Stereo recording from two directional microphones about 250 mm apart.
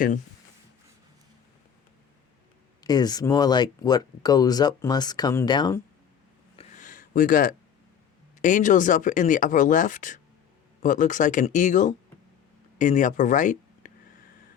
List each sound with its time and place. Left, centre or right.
2.8 s speech: centre
6.6 s a sound: left
8.4 s speech: left